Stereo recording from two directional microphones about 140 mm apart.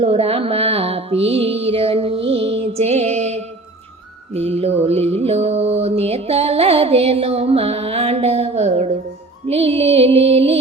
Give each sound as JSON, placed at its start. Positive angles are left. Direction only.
{"t": 0.0, "sound": "music", "side_deg": -45}
{"t": 4.4, "sound": "mantra", "side_deg": -45}
{"t": 9.5, "sound": "music", "side_deg": -45}